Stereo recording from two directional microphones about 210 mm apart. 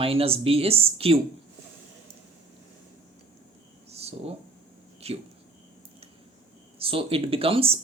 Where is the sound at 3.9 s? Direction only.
30° right (ahead or behind).